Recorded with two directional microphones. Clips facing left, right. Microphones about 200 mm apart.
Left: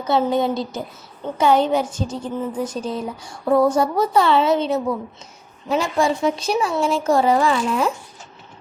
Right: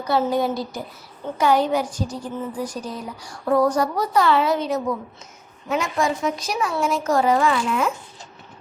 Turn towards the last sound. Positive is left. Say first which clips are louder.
# left 2 dB
turn(degrees=35)  # may be behind; listen again after turning